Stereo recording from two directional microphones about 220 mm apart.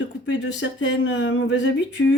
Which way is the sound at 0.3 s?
55° left (ahead or behind).